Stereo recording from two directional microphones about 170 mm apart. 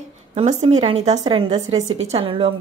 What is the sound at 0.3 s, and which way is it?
A woman's voice, 40° right (ahead or behind).